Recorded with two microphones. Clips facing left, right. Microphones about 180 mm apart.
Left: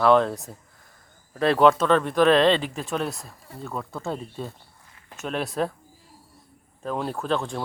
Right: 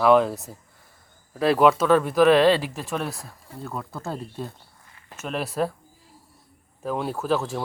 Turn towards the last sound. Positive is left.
turn(degrees=-5)  # may be behind; listen again after turning